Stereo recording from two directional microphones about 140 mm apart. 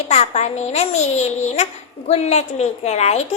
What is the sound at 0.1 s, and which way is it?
A child's voice, 50° left (ahead or behind).